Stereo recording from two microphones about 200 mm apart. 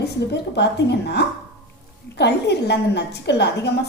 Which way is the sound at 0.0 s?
55° left (ahead or behind).